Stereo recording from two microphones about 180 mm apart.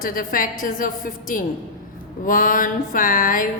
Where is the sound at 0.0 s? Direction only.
50° left (ahead or behind).